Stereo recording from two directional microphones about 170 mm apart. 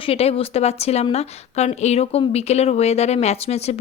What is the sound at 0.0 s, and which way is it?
Speech, 35° left (ahead or behind).